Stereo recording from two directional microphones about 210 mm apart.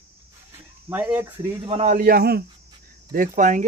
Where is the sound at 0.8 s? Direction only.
10° right (ahead or behind).